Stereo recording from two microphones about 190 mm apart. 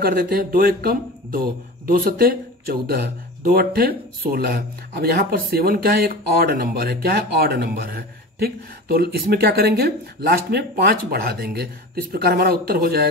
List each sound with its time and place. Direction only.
0.0 s speech: 50° right (ahead or behind)